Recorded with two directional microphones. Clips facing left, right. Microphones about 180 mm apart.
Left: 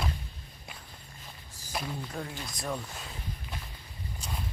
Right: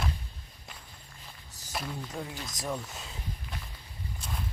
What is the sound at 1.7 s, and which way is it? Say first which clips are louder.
Speech: left 1 dB; centre (ahead or behind).